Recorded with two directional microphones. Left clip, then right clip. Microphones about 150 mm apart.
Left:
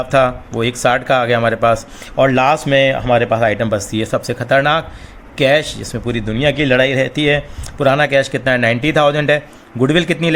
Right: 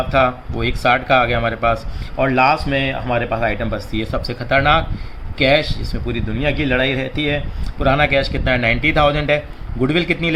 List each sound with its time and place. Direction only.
0.1 s speech: 55° left (ahead or behind)